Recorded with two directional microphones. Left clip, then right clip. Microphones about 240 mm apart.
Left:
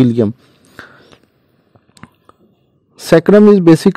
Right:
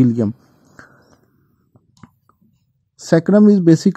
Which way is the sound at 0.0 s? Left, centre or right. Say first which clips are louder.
Left 4 dB; left.